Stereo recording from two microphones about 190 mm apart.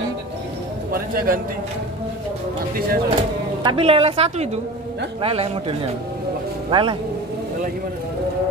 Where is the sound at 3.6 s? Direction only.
30° right (ahead or behind).